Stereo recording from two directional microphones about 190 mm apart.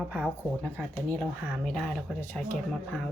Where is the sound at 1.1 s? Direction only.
5° left (ahead or behind).